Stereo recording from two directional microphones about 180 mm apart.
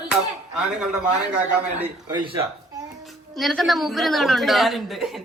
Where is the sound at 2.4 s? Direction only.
20° right (ahead or behind).